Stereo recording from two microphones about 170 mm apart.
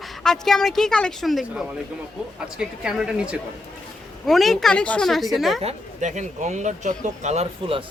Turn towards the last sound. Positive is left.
turn(degrees=-35)  # may be behind; listen again after turning